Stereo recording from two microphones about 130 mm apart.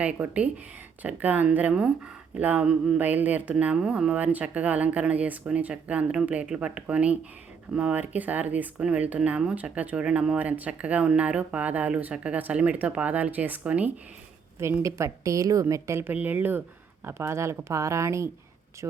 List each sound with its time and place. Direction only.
0.0 s speech: 10° right (ahead or behind)
14.6 s a woman's voice: 20° right (ahead or behind)